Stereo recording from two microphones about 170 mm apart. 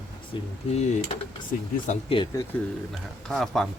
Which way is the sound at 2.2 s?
30° left (ahead or behind).